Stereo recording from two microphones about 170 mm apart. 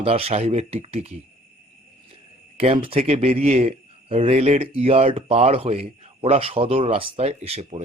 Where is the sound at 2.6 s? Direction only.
35° right (ahead or behind).